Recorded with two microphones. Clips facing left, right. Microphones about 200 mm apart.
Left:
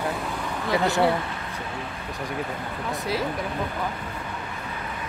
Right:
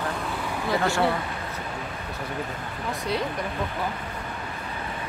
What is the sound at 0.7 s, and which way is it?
Speech, 20° left (ahead or behind).